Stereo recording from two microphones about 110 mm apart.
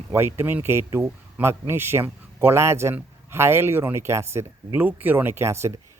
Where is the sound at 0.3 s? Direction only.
20° right (ahead or behind).